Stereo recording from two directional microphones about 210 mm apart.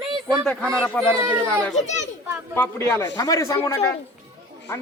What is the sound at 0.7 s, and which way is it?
Speech, 5° left (ahead or behind).